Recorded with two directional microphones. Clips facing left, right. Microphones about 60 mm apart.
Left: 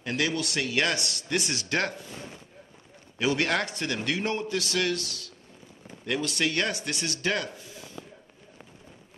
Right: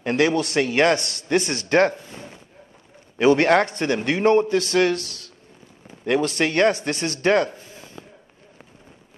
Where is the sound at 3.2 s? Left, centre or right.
Right.